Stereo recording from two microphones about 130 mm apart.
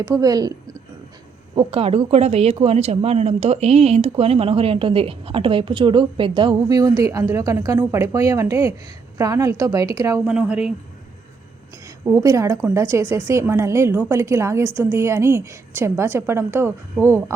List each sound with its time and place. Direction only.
0.0 s a woman's voice: 30° right (ahead or behind)
1.5 s a woman's voice: 45° right (ahead or behind); by 10.2 s 25° right (ahead or behind)
10.2 s speech: 10° right (ahead or behind)
12.0 s a woman's voice: 25° right (ahead or behind)